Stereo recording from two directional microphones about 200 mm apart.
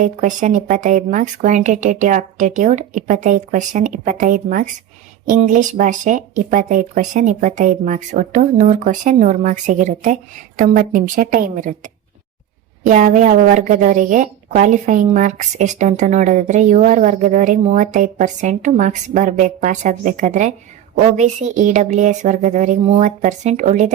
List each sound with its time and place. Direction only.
0.0 s a woman's voice: 40° right (ahead or behind)